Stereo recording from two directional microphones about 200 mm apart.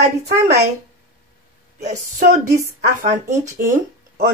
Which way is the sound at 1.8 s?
35° right (ahead or behind).